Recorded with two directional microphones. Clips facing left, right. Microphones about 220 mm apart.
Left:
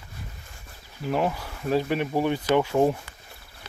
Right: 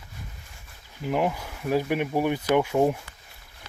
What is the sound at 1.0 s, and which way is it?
Speech, 15° right (ahead or behind).